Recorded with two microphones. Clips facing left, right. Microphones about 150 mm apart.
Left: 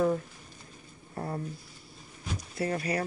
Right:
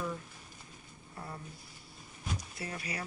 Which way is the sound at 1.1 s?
50° left (ahead or behind).